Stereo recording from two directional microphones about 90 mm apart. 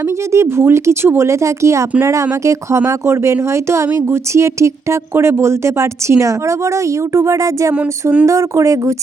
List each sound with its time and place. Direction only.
0.3 s speech: 30° right (ahead or behind)